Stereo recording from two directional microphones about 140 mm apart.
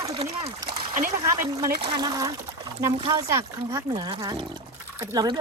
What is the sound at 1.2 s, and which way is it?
Speech, 25° right (ahead or behind).